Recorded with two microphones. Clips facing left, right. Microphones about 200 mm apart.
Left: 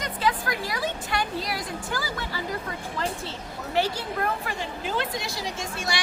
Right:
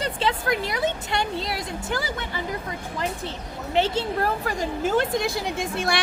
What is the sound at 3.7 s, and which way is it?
Speech, 20° right (ahead or behind).